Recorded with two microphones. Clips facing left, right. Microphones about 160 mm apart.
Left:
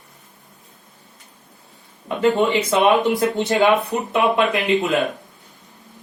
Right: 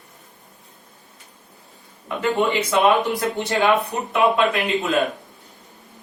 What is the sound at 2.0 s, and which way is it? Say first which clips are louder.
Speech: left 3 dB; 25° left (ahead or behind).